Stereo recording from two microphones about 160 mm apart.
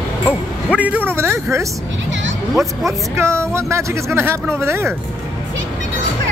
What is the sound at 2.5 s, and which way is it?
Speech, centre (ahead or behind).